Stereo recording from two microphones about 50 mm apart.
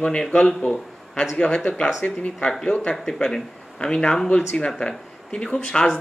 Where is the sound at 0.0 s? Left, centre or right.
Centre.